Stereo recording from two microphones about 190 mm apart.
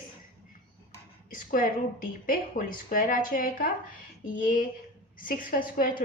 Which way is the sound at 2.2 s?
45° left (ahead or behind).